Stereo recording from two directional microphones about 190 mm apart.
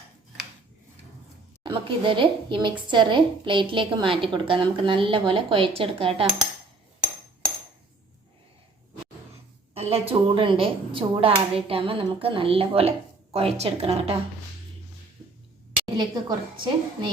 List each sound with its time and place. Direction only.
1.6 s a woman's voice: 25° right (ahead or behind)
9.7 s a woman's voice: 30° right (ahead or behind)
16.0 s a woman's voice: 25° right (ahead or behind)